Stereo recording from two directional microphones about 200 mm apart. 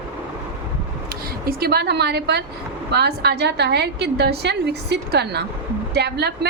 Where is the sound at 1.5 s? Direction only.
50° right (ahead or behind).